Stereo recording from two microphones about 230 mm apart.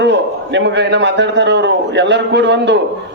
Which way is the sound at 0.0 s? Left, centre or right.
Right.